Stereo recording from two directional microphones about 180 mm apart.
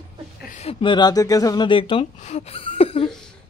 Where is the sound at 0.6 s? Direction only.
35° left (ahead or behind).